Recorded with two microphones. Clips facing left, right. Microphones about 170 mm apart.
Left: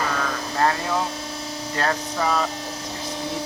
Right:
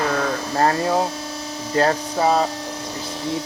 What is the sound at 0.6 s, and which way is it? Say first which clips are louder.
Speech: right 4 dB; 35° right (ahead or behind).